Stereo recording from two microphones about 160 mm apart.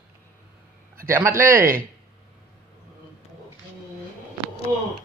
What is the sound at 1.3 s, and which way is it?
Speech, 60° right (ahead or behind).